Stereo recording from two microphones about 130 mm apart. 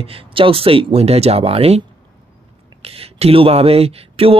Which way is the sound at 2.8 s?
50° right (ahead or behind).